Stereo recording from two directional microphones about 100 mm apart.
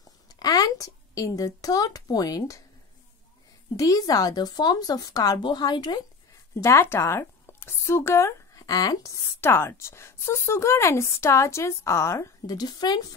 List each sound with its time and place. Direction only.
0.0 s a sound: 40° left (ahead or behind)
3.7 s speech: 35° left (ahead or behind)
6.5 s speech: 30° left (ahead or behind)
9.4 s speech: 25° left (ahead or behind)
12.4 s speech: 40° left (ahead or behind)